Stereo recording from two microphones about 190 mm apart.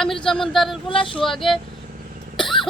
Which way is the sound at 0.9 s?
25° left (ahead or behind).